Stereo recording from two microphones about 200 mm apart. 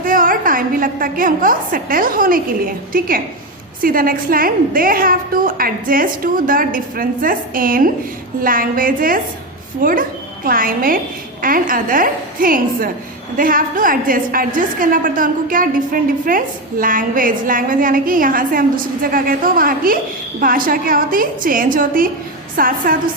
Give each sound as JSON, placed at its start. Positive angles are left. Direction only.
{"t": 0.0, "sound": "a woman's voice", "side_deg": -45}